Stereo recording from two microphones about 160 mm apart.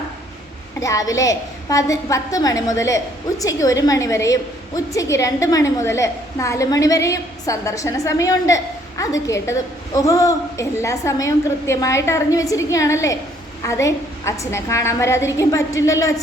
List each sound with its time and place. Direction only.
0.8 s a woman's voice: 20° left (ahead or behind)